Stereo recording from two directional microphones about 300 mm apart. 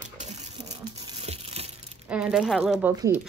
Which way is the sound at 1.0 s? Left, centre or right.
Centre.